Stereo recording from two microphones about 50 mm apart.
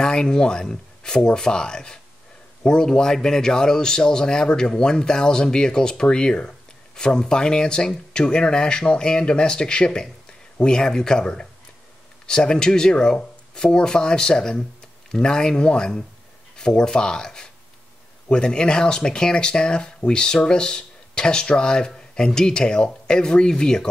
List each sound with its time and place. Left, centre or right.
0.0 s a man's voice: centre